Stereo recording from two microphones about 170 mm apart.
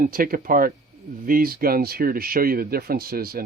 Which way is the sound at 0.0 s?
55° right (ahead or behind).